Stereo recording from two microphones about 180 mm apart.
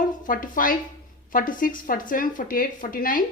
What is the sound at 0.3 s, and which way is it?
A woman's voice, 50° left (ahead or behind).